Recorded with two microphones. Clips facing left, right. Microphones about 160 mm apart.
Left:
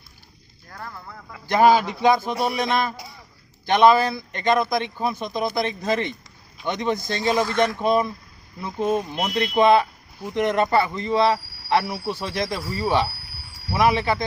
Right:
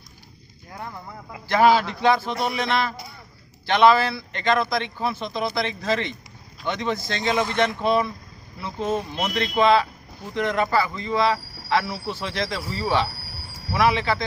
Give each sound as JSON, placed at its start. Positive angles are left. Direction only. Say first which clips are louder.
{"t": 0.7, "sound": "speech", "louder": "right 2 dB", "side_deg": -20}
{"t": 1.5, "sound": "speech", "louder": "left 1 dB", "side_deg": 15}
{"t": 7.4, "sound": "speech", "louder": "left 1 dB", "side_deg": -20}
{"t": 7.8, "sound": "speech", "louder": "left 1 dB", "side_deg": 15}